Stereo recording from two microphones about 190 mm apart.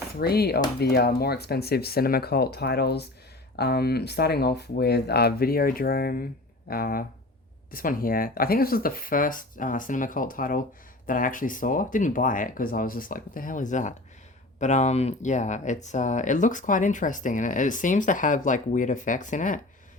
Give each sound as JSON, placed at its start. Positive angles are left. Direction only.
{"t": 0.2, "sound": "speech", "side_deg": 55}